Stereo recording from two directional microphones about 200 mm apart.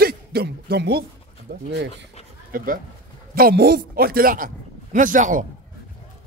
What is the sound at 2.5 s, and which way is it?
A man's voice, 45° right (ahead or behind).